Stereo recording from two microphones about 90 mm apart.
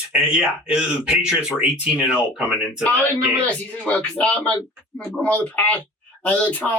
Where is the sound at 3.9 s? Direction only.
15° left (ahead or behind).